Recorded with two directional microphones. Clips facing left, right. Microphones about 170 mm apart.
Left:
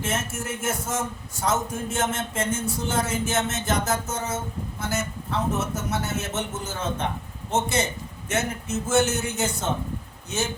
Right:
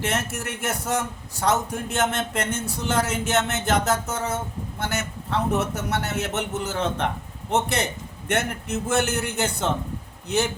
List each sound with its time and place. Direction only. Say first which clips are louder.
0.0 s a man's voice: right 2 dB; 65° right (ahead or behind)